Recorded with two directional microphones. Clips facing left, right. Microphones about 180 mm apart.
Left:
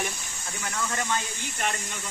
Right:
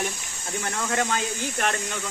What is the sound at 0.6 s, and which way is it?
Speech, 60° right (ahead or behind).